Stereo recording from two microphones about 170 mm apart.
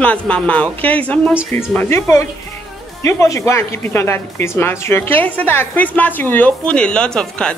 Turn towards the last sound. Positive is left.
turn(degrees=5)  # may be behind; listen again after turning